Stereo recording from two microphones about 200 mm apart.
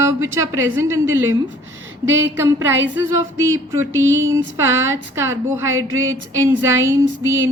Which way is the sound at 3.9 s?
75° right (ahead or behind).